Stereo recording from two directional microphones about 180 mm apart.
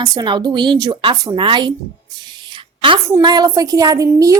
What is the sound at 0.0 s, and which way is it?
A woman's voice, 20° right (ahead or behind).